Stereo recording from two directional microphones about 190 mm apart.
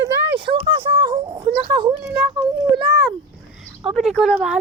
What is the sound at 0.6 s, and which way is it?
Speech, 30° right (ahead or behind).